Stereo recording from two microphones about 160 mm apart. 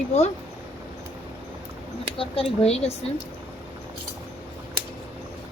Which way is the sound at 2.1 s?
35° left (ahead or behind).